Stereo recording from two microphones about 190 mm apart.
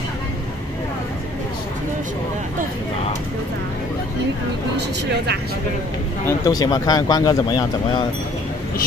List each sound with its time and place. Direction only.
4.7 s speech: 60° right (ahead or behind)
6.2 s speech: 20° left (ahead or behind)